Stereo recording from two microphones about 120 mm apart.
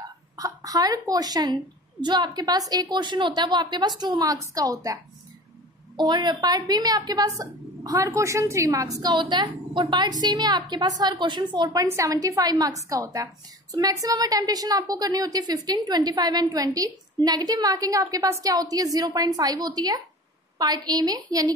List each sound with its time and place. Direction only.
0.4 s a woman's voice: 30° right (ahead or behind)
5.9 s a woman's voice: 35° right (ahead or behind)